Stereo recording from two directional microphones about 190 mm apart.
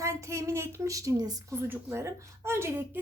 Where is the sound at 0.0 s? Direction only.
15° right (ahead or behind).